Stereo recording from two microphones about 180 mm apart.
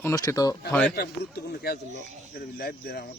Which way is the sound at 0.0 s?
15° left (ahead or behind).